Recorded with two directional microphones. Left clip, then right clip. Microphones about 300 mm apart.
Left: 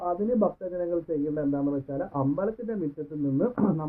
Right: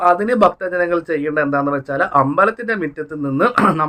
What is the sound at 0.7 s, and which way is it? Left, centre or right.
A man's voice, right.